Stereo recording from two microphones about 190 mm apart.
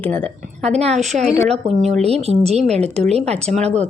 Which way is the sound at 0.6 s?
35° right (ahead or behind).